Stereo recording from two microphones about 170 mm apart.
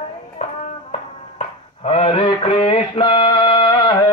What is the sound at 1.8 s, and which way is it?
Mantra, 35° left (ahead or behind).